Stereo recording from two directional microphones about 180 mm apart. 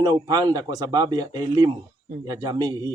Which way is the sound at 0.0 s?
25° right (ahead or behind).